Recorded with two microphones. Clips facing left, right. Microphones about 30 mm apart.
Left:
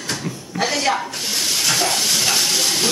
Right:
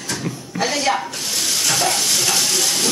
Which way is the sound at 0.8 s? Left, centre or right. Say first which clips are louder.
Even; centre.